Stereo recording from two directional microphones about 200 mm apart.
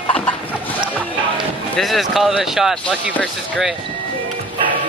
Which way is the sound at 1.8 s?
Centre (ahead or behind).